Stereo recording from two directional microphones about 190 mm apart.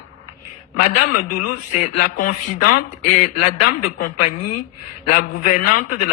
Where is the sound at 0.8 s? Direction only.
45° left (ahead or behind).